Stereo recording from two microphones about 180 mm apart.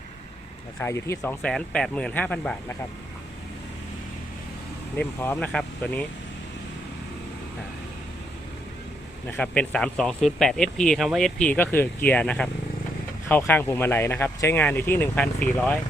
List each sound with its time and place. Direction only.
0.8 s speech: 15° left (ahead or behind)
4.9 s speech: 10° left (ahead or behind)
9.2 s speech: 10° left (ahead or behind)